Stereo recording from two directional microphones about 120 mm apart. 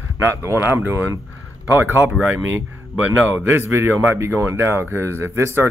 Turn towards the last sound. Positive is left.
turn(degrees=-20)  # may be behind; listen again after turning